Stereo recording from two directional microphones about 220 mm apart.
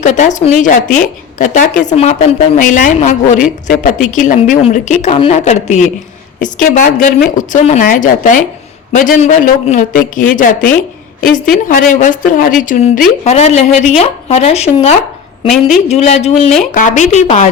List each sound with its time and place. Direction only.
0.0 s a woman's voice: 35° left (ahead or behind)
11.3 s a woman's voice: centre (ahead or behind)
11.7 s a woman's voice: 35° left (ahead or behind)
15.4 s a woman's voice: centre (ahead or behind)
15.9 s a woman's voice: 30° left (ahead or behind)